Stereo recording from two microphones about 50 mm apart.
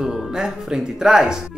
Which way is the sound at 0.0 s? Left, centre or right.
Centre.